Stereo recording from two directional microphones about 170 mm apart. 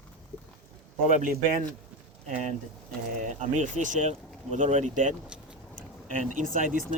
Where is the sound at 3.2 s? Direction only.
45° right (ahead or behind).